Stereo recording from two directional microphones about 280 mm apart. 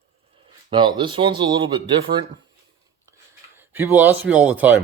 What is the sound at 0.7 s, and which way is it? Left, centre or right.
Speech, centre.